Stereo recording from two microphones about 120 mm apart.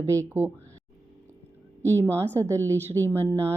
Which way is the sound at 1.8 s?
20° right (ahead or behind).